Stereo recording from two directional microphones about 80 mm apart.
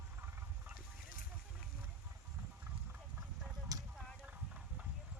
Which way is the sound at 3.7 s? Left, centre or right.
Right.